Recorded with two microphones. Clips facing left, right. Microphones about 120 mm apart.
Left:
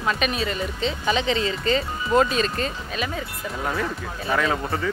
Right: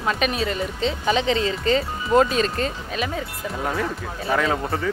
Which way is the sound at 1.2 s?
50° right (ahead or behind).